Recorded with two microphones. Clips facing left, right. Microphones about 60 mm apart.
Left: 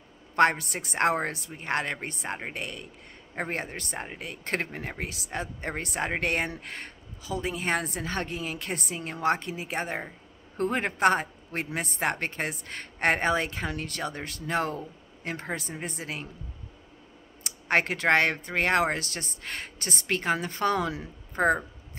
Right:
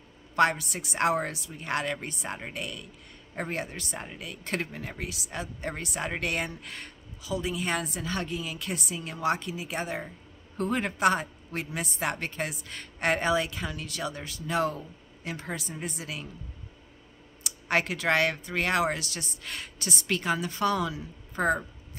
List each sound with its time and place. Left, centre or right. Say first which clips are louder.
0.4 s a woman's voice: left 2 dB; left
17.4 s a woman's voice: left 2 dB; left